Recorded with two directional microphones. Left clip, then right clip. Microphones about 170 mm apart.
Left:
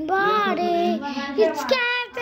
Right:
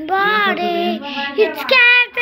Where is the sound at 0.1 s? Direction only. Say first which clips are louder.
Right 5 dB; 20° left (ahead or behind).